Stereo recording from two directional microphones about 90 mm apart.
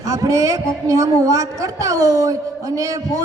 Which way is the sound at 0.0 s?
40° right (ahead or behind).